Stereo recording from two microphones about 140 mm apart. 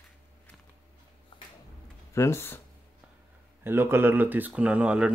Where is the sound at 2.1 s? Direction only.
20° left (ahead or behind).